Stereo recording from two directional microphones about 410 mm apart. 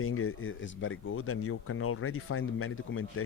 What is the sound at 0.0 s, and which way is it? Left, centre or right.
Speech, left.